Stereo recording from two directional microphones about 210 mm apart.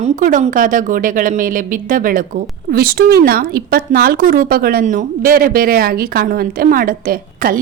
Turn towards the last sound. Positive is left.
turn(degrees=-45)  # may be behind; listen again after turning